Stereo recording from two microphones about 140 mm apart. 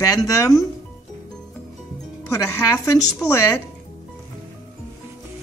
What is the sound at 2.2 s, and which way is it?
Speech, 20° left (ahead or behind).